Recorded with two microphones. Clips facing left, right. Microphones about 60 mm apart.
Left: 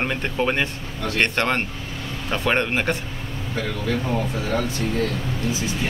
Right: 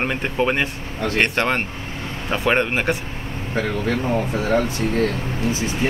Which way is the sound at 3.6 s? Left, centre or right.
Right.